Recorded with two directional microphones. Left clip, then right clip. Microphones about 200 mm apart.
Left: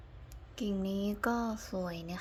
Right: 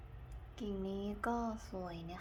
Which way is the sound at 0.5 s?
25° left (ahead or behind).